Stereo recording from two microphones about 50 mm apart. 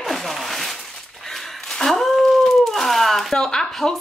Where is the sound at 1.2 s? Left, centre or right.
Centre.